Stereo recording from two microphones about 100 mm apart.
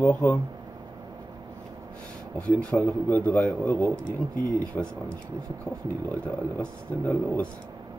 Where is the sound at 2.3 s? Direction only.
15° left (ahead or behind).